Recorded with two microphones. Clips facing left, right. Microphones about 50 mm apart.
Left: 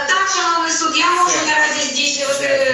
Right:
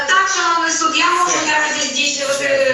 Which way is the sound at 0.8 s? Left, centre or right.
Centre.